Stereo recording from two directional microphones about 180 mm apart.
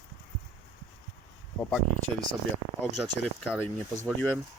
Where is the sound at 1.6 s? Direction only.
20° left (ahead or behind).